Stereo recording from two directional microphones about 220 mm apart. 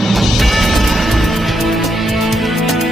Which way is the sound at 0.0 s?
Centre (ahead or behind).